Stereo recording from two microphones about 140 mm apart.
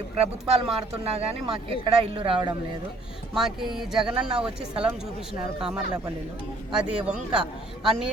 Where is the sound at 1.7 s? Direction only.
40° right (ahead or behind).